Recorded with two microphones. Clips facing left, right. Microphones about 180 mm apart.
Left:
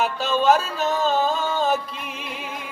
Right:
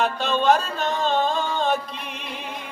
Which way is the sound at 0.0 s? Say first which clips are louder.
Left 1 dB; 5° left (ahead or behind).